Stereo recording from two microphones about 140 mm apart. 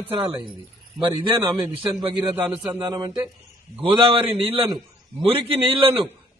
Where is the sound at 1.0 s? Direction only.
35° right (ahead or behind).